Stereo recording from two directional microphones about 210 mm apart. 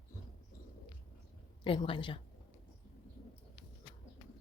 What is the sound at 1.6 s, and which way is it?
Speech, 25° left (ahead or behind).